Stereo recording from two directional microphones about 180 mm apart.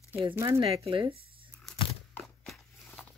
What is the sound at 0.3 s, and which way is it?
Speech, 15° right (ahead or behind).